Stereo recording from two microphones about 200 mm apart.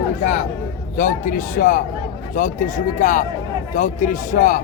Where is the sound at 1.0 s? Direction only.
40° left (ahead or behind).